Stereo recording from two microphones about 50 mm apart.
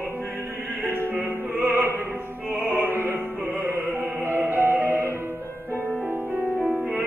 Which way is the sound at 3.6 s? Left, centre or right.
Right.